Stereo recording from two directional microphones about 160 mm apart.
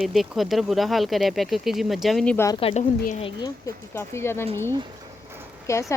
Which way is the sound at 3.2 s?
25° left (ahead or behind).